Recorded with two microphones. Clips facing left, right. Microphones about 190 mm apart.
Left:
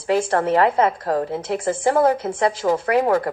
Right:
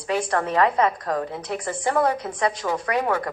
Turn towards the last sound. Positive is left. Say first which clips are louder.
# left 6 dB
turn(degrees=30)  # may be behind; listen again after turning